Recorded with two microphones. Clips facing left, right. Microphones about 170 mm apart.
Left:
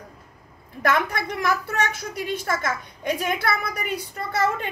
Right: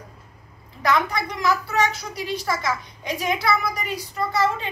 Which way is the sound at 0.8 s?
55° left (ahead or behind).